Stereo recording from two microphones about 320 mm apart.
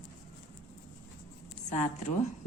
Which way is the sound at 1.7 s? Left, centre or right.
Left.